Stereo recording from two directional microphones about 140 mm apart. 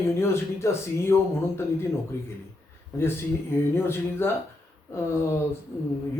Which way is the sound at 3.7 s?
15° left (ahead or behind).